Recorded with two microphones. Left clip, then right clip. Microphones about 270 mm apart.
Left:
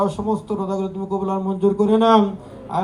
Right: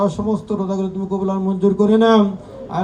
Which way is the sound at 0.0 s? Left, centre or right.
Centre.